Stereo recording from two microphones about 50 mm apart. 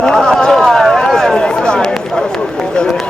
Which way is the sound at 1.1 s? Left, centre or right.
Centre.